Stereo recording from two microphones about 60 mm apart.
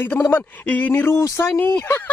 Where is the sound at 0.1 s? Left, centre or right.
Left.